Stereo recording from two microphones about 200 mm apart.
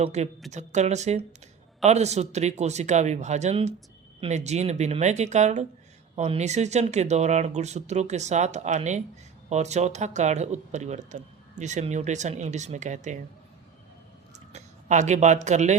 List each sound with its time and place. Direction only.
0.0 s speech: 35° right (ahead or behind)
14.5 s speech: 35° right (ahead or behind)